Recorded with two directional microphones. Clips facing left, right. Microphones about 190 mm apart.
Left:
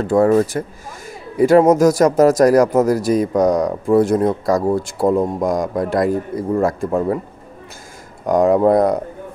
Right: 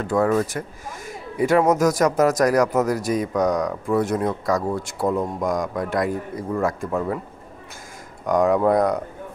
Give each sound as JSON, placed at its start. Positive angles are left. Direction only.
{"t": 0.0, "sound": "speech", "side_deg": 30}
{"t": 8.3, "sound": "speech", "side_deg": 30}